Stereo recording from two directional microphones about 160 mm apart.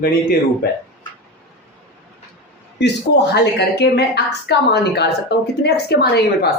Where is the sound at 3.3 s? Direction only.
90° left.